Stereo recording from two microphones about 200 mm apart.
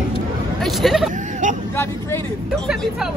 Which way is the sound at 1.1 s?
40° right (ahead or behind).